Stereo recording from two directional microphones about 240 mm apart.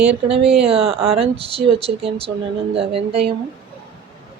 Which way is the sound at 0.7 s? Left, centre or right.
Right.